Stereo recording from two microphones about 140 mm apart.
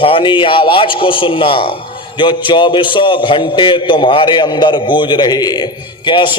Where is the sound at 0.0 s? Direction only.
40° left (ahead or behind).